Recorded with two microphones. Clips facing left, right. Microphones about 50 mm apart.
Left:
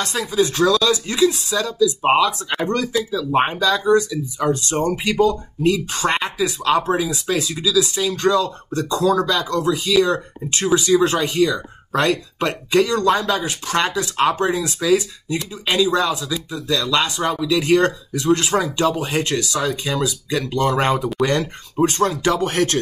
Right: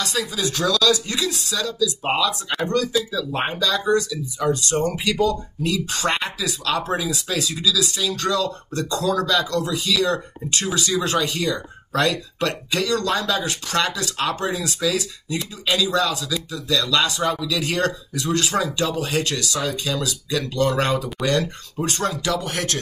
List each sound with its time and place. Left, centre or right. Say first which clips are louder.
0.0 s speech: left 5 dB; left